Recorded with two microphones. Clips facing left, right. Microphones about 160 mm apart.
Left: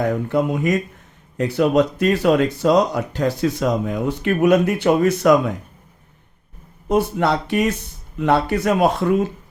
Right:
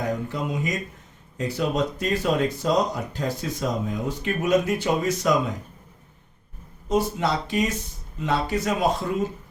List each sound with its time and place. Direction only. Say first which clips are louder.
0.3 s speech: left 9 dB; 60° left (ahead or behind)
6.8 s speech: left 5 dB; 60° left (ahead or behind)